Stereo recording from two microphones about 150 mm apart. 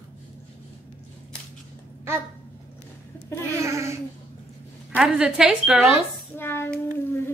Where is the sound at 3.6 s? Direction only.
20° right (ahead or behind).